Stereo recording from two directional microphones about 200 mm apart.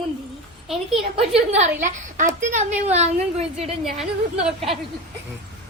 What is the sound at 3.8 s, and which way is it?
Speech, centre (ahead or behind).